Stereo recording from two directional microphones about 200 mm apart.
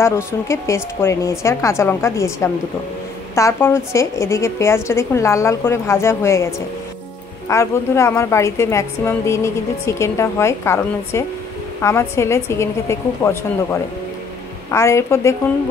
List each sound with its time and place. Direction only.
0.0 s a woman's voice: 15° left (ahead or behind)
14.7 s a woman's voice: 15° left (ahead or behind)